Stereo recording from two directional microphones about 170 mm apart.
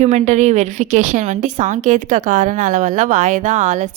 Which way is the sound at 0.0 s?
45° right (ahead or behind).